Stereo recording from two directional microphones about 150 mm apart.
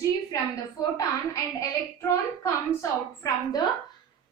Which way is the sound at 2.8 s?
20° left (ahead or behind).